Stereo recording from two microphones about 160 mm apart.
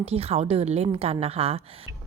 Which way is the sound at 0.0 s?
40° right (ahead or behind).